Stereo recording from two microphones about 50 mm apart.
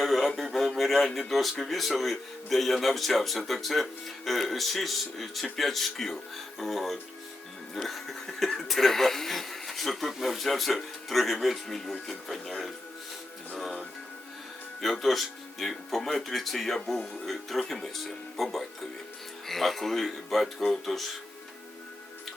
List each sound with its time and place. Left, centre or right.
0.0 s speech: centre